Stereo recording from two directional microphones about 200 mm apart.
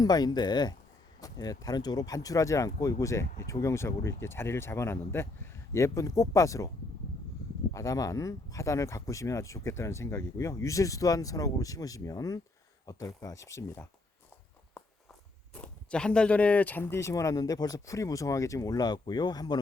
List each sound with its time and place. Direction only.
0.0 s speech: 20° left (ahead or behind)
7.7 s speech: 15° left (ahead or behind)
15.5 s speech: 5° left (ahead or behind)